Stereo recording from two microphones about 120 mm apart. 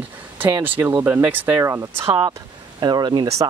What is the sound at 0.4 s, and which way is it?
Speech, 15° right (ahead or behind).